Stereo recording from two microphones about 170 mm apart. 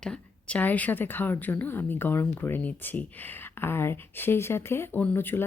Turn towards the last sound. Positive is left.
turn(degrees=15)  # may be behind; listen again after turning